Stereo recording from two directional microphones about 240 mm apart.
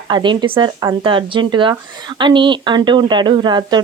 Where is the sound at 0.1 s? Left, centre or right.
Centre.